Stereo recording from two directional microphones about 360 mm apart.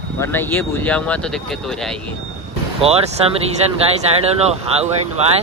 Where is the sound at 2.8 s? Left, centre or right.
Centre.